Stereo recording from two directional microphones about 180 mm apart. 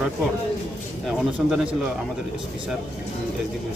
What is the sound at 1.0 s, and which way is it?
Speech, 5° right (ahead or behind).